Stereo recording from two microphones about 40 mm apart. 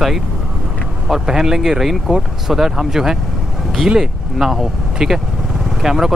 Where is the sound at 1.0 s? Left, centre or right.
Centre.